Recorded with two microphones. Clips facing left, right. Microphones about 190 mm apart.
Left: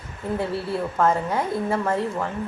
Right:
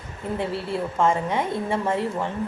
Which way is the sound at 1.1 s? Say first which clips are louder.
Even; centre (ahead or behind).